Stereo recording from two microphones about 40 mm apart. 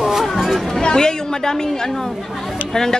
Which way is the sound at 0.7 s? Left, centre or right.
Centre.